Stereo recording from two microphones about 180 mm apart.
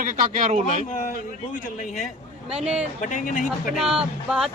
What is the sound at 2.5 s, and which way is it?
Speech, 5° right (ahead or behind).